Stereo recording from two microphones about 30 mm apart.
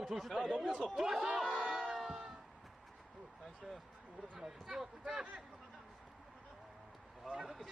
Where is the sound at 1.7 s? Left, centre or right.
Centre.